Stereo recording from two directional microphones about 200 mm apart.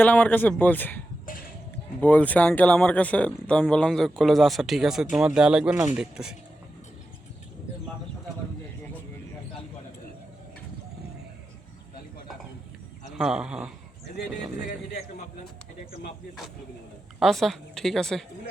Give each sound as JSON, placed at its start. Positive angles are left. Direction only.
{"t": 0.0, "sound": "speech", "side_deg": 10}
{"t": 1.3, "sound": "a sound", "side_deg": 45}
{"t": 2.0, "sound": "speech", "side_deg": 10}
{"t": 13.1, "sound": "speech", "side_deg": -5}
{"t": 17.2, "sound": "speech", "side_deg": 0}